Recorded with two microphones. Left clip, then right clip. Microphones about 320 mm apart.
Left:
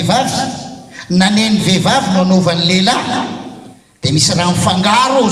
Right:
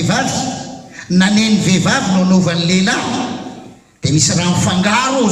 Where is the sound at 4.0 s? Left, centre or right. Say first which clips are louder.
Left 2 dB; centre.